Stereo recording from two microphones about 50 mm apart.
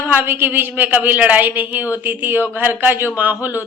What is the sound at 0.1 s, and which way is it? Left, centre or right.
A man's voice, right.